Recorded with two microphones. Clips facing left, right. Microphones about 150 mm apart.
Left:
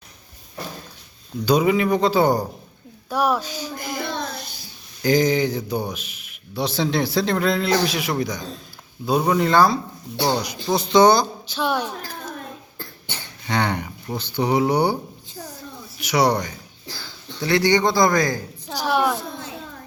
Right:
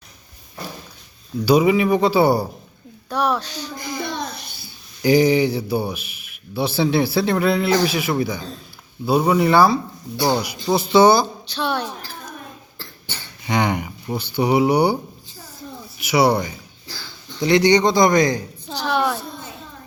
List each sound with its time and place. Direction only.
1.5 s speech: 10° right (ahead or behind)
3.1 s speech: 10° left (ahead or behind)
5.0 s speech: 10° right (ahead or behind)
11.4 s speech: 10° left (ahead or behind)
13.5 s speech: 10° right (ahead or behind)
16.0 s speech: 5° right (ahead or behind)
17.4 s speech: 20° right (ahead or behind)
18.9 s speech: 10° left (ahead or behind)